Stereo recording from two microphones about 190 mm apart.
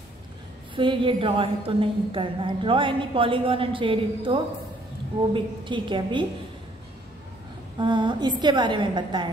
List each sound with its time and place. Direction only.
0.7 s a woman's voice: 25° right (ahead or behind)
7.8 s a woman's voice: 25° right (ahead or behind)